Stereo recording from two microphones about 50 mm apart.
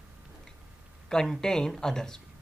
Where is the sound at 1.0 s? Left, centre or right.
Centre.